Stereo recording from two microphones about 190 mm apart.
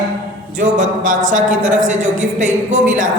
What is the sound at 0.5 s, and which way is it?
A man's voice, 40° right (ahead or behind).